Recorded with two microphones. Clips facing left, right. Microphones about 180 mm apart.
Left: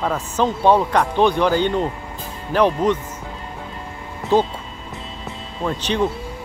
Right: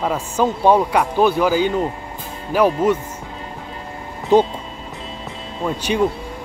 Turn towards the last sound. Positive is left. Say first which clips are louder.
# right 2 dB
turn(degrees=-10)  # may be behind; listen again after turning